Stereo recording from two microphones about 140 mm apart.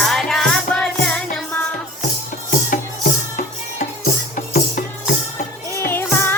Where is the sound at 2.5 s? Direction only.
80° left.